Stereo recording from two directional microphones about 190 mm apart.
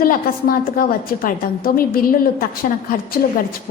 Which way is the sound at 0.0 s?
50° left (ahead or behind).